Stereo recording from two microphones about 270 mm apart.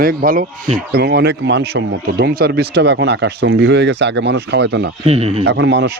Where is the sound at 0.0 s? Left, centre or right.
Right.